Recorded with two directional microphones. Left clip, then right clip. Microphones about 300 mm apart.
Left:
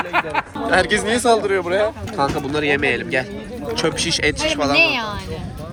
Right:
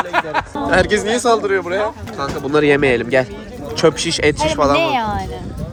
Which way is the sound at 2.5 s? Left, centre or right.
Right.